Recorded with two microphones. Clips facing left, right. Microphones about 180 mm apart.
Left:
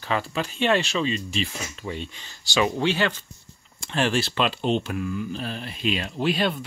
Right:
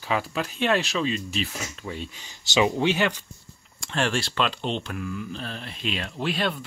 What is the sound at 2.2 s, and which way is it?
Speech, 20° right (ahead or behind).